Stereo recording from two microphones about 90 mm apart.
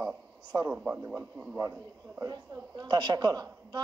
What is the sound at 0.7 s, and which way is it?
Speech, 10° right (ahead or behind).